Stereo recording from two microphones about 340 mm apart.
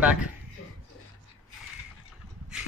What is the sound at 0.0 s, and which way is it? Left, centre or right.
Speech, centre.